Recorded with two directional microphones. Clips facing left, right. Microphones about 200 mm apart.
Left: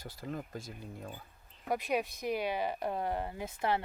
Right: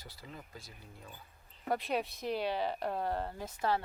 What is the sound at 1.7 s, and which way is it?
Speech, 15° left (ahead or behind).